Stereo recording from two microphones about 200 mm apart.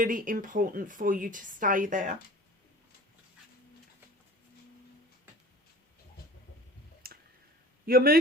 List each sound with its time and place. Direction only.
0.0 s a woman's voice: 45° right (ahead or behind)
7.0 s a sound: 50° right (ahead or behind)
7.9 s a man's voice: 50° right (ahead or behind)